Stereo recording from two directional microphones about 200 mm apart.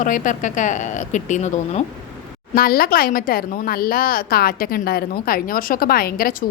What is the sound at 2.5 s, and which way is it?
Speech, 45° left (ahead or behind).